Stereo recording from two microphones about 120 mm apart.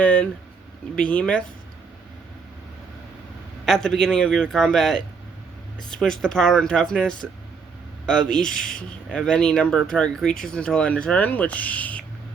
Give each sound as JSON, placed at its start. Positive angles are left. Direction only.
{"t": 0.0, "sound": "a sound", "side_deg": 10}
{"t": 0.9, "sound": "speech", "side_deg": 10}
{"t": 3.7, "sound": "speech", "side_deg": 5}